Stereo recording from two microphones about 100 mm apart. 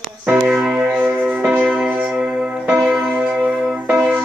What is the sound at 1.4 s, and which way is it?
Music, 5° right (ahead or behind).